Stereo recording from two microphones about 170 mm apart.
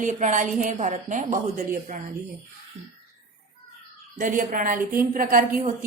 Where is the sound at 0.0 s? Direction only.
45° right (ahead or behind).